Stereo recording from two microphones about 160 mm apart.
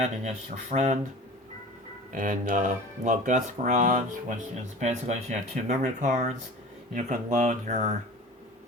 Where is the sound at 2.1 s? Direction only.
55° right (ahead or behind).